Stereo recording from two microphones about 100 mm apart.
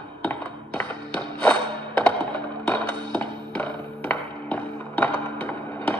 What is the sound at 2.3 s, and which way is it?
Music, 10° left (ahead or behind).